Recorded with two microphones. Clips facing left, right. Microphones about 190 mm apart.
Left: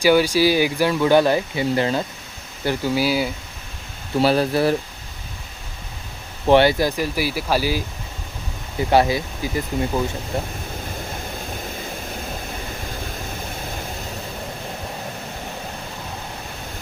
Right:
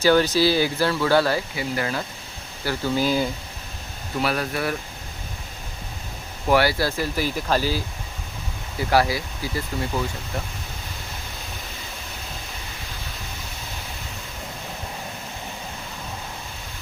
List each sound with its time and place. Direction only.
0.0 s speech: 10° left (ahead or behind)
2.6 s speech: 10° left (ahead or behind)
4.2 s speech: 30° left (ahead or behind)
6.5 s speech: 20° left (ahead or behind)